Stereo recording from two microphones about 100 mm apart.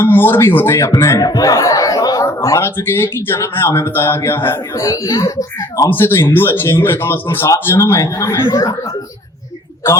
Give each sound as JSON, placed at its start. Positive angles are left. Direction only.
{"t": 0.0, "sound": "a man's voice", "side_deg": 20}
{"t": 4.8, "sound": "a child's voice", "side_deg": 35}
{"t": 5.9, "sound": "a man's voice", "side_deg": 25}